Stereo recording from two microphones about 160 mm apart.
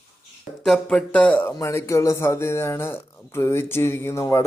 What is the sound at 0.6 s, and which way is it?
Speech, 5° left (ahead or behind).